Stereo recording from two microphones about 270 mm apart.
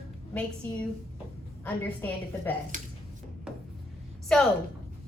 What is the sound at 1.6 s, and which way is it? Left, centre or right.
Speech, centre.